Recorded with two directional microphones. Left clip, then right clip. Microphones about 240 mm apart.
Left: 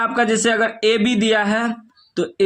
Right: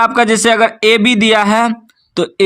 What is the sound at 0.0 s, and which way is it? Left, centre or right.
A man's voice, right.